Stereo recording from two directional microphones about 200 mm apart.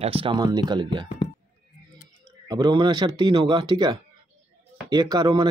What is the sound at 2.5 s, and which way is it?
Speech, 20° right (ahead or behind).